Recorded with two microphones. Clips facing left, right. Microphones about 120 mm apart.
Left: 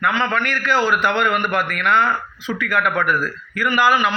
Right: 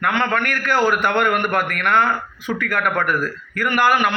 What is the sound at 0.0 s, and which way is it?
A man's voice, 55° right (ahead or behind).